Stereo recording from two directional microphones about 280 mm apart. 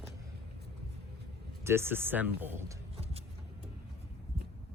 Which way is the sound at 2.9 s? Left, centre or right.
Right.